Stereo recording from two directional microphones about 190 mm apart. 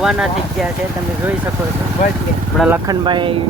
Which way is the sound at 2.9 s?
25° right (ahead or behind).